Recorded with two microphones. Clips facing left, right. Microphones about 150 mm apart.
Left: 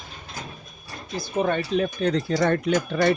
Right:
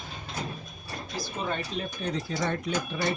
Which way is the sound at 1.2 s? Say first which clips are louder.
Left 9 dB; 60° left (ahead or behind).